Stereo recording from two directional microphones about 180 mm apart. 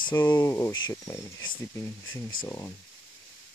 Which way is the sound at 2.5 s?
15° left (ahead or behind).